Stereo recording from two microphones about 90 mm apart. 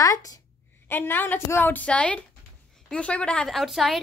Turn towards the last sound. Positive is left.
turn(degrees=0)  # may be behind; listen again after turning